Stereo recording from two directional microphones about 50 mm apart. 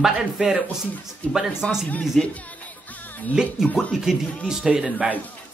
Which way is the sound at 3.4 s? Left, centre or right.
Centre.